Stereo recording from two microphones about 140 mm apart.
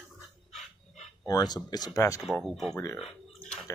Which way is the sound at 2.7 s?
25° left (ahead or behind).